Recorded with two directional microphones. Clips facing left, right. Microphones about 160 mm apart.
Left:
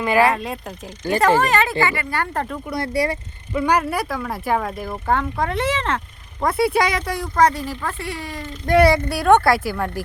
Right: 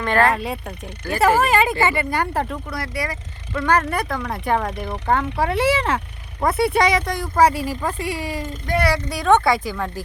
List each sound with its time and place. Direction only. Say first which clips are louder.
0.0 s speech: left 1 dB; 5° left (ahead or behind)
2.6 s speech: left 5 dB; 25° left (ahead or behind)
3.5 s speech: left 1 dB; 15° left (ahead or behind)
7.3 s speech: right 1 dB; 10° right (ahead or behind)
9.0 s speech: left 2 dB; 10° left (ahead or behind)